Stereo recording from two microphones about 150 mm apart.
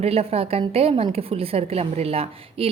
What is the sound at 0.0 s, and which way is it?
A woman's voice, 40° right (ahead or behind).